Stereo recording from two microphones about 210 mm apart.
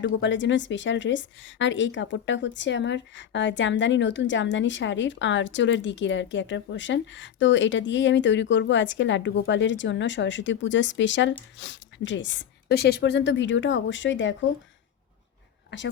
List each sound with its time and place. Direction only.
0.0 s a woman's voice: 60° left (ahead or behind)